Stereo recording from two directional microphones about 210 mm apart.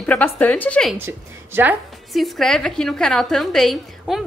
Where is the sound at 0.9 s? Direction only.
10° right (ahead or behind).